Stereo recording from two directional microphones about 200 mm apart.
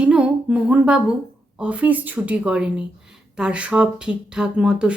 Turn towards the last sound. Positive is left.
turn(degrees=-5)  # may be behind; listen again after turning